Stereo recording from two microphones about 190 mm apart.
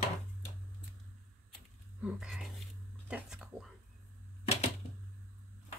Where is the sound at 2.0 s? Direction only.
5° right (ahead or behind).